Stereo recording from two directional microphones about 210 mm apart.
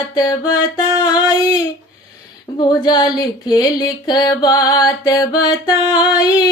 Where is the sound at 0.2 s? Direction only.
15° left (ahead or behind).